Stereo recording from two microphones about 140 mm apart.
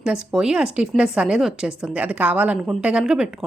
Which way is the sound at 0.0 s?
5° right (ahead or behind).